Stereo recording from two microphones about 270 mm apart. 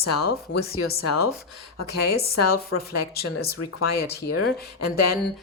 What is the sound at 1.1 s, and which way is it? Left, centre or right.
Speech, left.